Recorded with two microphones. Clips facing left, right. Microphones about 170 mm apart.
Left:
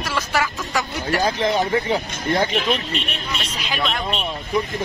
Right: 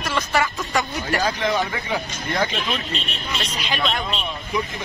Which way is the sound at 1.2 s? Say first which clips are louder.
Left 3 dB; 30° left (ahead or behind).